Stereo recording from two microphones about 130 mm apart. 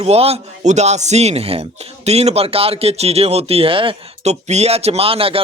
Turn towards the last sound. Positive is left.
turn(degrees=-45)  # may be behind; listen again after turning